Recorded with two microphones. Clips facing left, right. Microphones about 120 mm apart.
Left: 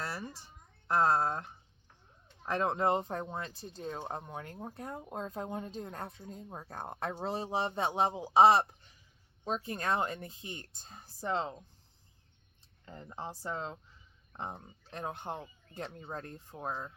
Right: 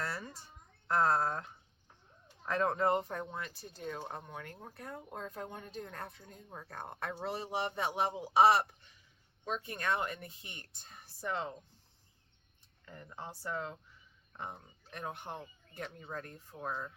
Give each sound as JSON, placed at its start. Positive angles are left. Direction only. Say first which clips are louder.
{"t": 0.0, "sound": "a sound", "louder": "left 1 dB", "side_deg": 20}
{"t": 0.9, "sound": "speech", "louder": "left 2 dB", "side_deg": 25}
{"t": 2.5, "sound": "speech", "louder": "left 1 dB", "side_deg": 20}
{"t": 9.6, "sound": "speech", "louder": "left 2 dB", "side_deg": 30}
{"t": 12.8, "sound": "speech", "louder": "left 4 dB", "side_deg": 25}